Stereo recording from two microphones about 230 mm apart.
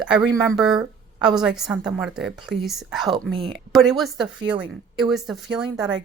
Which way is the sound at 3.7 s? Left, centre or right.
Centre.